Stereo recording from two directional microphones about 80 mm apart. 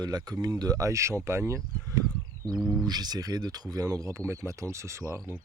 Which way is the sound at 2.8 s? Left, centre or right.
Right.